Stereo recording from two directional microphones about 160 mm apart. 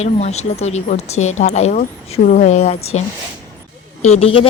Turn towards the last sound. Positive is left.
turn(degrees=35)  # may be behind; listen again after turning